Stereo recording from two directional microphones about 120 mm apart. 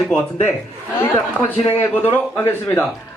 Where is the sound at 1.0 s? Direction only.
15° left (ahead or behind).